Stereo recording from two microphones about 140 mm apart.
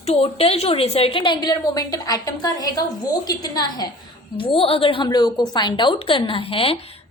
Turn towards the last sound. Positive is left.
turn(degrees=40)  # may be behind; listen again after turning